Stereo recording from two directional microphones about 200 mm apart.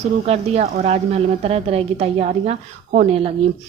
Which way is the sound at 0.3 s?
30° right (ahead or behind).